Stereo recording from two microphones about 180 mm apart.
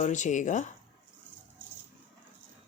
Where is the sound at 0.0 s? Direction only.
40° left (ahead or behind).